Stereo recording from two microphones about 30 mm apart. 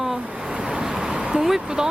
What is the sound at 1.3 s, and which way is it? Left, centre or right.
Speech, centre.